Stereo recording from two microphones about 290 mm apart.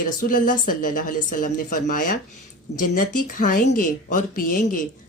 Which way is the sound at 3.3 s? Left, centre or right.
Left.